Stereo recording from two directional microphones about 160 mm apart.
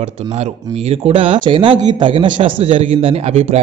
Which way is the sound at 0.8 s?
40° right (ahead or behind).